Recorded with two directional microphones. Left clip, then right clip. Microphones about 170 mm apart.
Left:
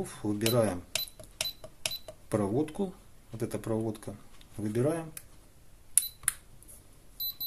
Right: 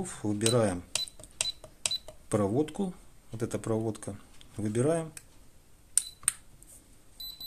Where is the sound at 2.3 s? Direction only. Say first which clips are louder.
Right 2 dB; 20° right (ahead or behind).